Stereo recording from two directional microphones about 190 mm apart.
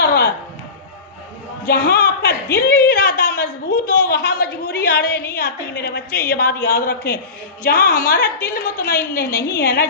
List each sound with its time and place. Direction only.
0.0 s music: 60° left (ahead or behind)
1.6 s a woman's voice: 55° left (ahead or behind)
2.9 s a sound: 55° left (ahead or behind)
5.4 s a woman's voice: 55° left (ahead or behind)